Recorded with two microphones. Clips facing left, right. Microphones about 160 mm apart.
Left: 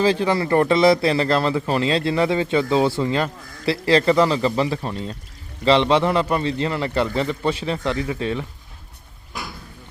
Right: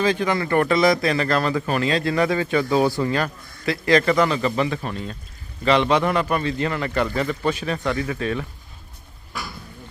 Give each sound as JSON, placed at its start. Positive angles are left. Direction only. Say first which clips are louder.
{"t": 0.0, "sound": "speech", "louder": "left 2 dB", "side_deg": 30}